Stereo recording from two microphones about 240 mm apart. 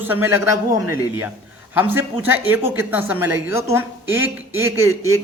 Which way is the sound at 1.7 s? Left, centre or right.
Centre.